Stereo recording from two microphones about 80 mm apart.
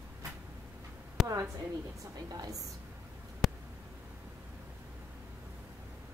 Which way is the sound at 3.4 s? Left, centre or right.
Centre.